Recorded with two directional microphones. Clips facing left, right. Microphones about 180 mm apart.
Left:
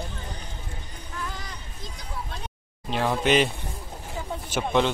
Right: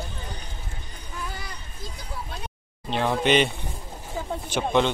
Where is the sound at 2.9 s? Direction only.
Centre (ahead or behind).